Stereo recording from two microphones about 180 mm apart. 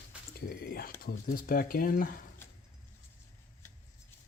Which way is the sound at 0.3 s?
55° left (ahead or behind).